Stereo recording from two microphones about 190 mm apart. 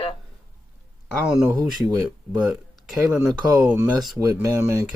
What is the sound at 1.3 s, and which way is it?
Speech, 5° right (ahead or behind).